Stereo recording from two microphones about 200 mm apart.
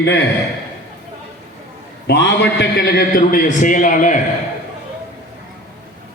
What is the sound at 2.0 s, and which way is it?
A man's voice, 60° left (ahead or behind).